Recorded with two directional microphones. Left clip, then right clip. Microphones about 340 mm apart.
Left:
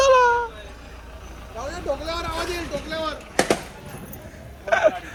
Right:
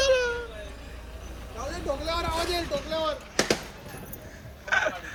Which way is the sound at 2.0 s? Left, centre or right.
Right.